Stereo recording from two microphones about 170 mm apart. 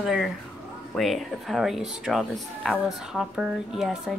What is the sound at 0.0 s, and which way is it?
Speech, centre (ahead or behind).